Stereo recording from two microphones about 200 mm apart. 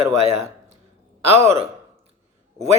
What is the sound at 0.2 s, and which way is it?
Speech, 30° right (ahead or behind).